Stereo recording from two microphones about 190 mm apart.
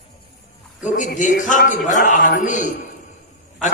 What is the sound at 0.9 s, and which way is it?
A man's voice, 40° left (ahead or behind).